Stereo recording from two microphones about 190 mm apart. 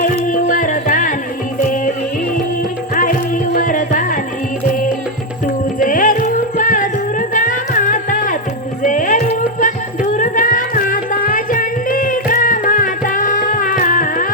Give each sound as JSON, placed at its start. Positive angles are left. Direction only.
{"t": 0.0, "sound": "music", "side_deg": 45}
{"t": 2.9, "sound": "music", "side_deg": 45}